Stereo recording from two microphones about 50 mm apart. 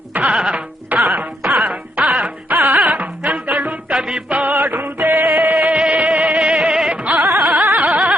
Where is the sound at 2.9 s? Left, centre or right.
Right.